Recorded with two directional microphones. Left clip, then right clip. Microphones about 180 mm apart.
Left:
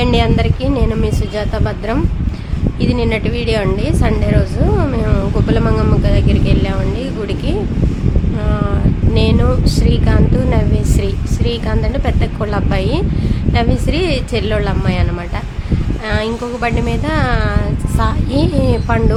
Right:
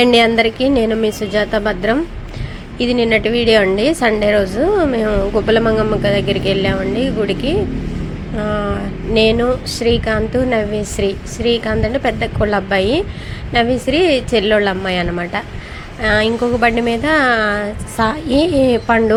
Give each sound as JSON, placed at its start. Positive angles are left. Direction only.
{"t": 0.0, "sound": "speech", "side_deg": -25}
{"t": 9.1, "sound": "speech", "side_deg": -15}
{"t": 16.0, "sound": "speech", "side_deg": -15}